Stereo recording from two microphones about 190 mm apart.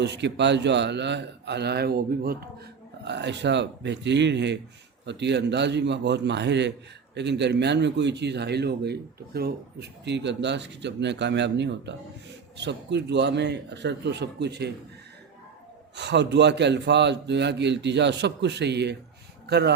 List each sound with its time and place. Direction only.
0.0 s a man's voice: 65° right (ahead or behind)
3.0 s a man's voice: 65° right (ahead or behind)
16.0 s a man's voice: 65° right (ahead or behind)